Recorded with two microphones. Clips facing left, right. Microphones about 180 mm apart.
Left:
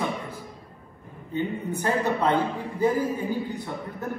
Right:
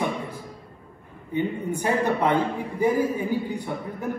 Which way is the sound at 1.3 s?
15° right (ahead or behind).